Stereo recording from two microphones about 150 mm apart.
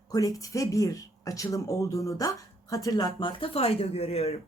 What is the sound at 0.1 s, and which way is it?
Speech, 25° left (ahead or behind).